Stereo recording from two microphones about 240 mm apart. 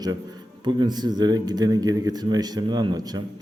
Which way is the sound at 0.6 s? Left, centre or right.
Centre.